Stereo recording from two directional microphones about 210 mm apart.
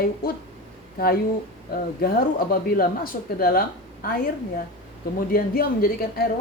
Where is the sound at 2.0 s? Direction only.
45° left (ahead or behind).